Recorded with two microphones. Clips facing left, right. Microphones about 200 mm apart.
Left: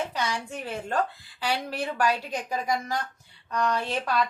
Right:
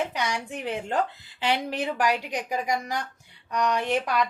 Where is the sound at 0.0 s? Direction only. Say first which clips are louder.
Right 1 dB; 15° right (ahead or behind).